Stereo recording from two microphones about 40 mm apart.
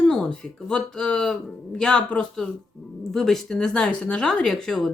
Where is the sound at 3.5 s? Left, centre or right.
Centre.